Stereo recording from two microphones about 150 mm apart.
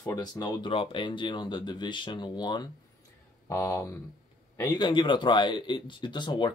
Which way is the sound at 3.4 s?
15° left (ahead or behind).